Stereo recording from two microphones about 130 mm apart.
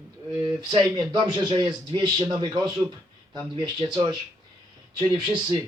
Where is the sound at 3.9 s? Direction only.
30° right (ahead or behind).